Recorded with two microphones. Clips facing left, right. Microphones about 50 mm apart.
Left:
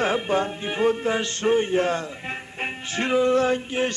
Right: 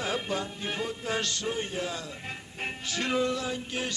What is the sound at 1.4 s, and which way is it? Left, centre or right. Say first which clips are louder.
Speech: left 12 dB; left.